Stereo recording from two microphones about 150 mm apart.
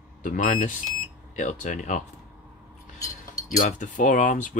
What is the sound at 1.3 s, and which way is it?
Speech, 55° left (ahead or behind).